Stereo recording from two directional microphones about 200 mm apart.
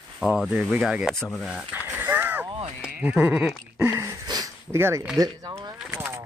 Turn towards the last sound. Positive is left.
turn(degrees=-10)  # may be behind; listen again after turning